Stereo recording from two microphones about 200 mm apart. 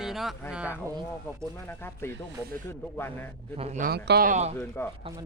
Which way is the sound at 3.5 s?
30° right (ahead or behind).